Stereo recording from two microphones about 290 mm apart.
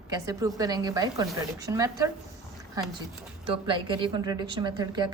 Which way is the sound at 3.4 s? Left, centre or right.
Centre.